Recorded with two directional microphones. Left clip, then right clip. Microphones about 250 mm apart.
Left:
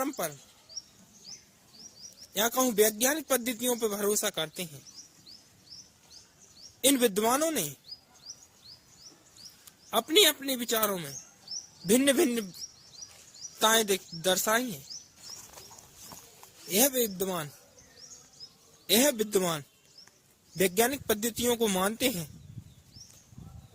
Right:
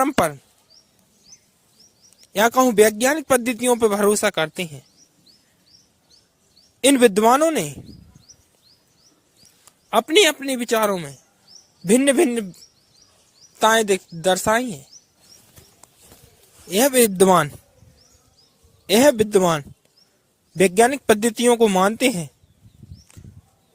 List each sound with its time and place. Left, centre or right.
0.0 s speech: right
2.3 s speech: right
6.8 s speech: right
9.9 s speech: right
13.6 s speech: right
16.6 s speech: right
18.9 s speech: right